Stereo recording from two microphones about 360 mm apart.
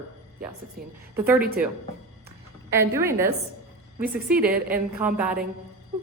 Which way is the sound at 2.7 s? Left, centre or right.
Centre.